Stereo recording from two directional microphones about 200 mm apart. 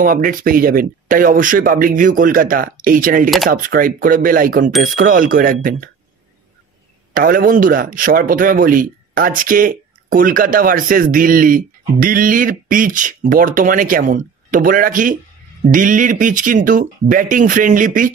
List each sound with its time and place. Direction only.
0.0 s a man's voice: 45° right (ahead or behind)
7.2 s a man's voice: 45° right (ahead or behind)